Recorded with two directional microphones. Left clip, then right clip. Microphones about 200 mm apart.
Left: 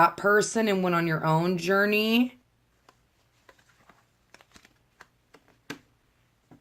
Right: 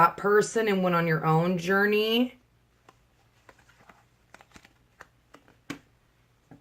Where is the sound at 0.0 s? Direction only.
40° left (ahead or behind).